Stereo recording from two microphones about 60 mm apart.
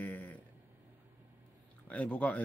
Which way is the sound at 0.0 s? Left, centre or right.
Left.